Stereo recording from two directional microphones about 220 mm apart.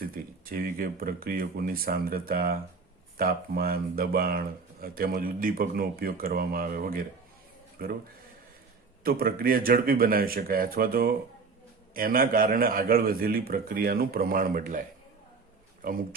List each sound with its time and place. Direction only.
0.0 s speech: 40° right (ahead or behind)
9.0 s speech: 40° right (ahead or behind)